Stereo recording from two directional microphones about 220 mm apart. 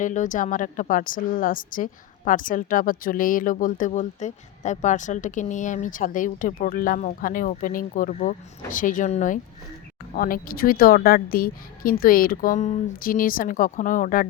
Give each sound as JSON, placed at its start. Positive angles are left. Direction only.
{"t": 0.0, "sound": "a woman's voice", "side_deg": 35}